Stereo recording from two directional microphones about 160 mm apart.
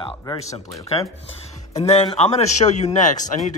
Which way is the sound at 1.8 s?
40° left (ahead or behind).